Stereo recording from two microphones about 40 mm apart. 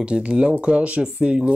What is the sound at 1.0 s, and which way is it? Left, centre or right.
Speech, centre.